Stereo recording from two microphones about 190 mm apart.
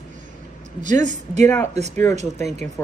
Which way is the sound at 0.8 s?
40° right (ahead or behind).